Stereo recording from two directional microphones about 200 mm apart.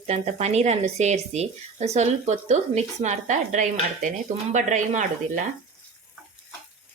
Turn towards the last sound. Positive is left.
turn(degrees=-40)  # may be behind; listen again after turning